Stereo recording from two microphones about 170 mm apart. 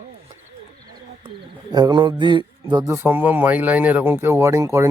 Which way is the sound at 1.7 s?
25° right (ahead or behind).